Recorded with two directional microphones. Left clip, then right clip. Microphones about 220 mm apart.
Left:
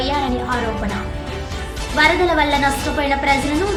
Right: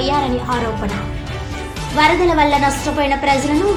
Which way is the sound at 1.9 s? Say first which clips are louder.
Right 2 dB; 5° right (ahead or behind).